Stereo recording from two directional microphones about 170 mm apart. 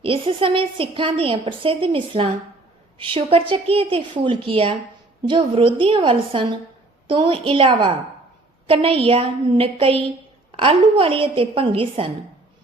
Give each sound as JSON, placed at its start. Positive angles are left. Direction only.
{"t": 0.0, "sound": "a woman's voice", "side_deg": -30}